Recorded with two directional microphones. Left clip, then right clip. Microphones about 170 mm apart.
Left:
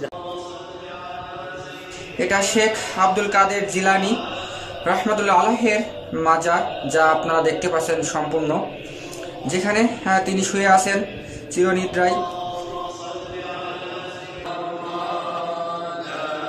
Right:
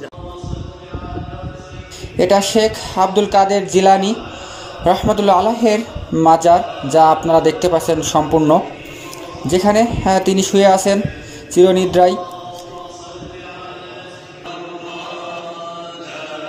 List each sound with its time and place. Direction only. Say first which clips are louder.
2.1 s speech: right 6 dB; 30° right (ahead or behind)
9.5 s speech: right 7 dB; 35° right (ahead or behind)